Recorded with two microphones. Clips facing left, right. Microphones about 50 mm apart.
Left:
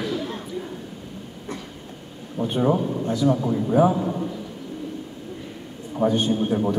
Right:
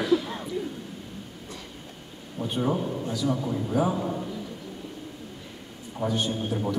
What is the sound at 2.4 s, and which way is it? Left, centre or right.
A man's voice, left.